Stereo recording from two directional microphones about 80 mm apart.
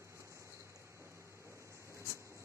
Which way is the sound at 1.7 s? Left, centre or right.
Right.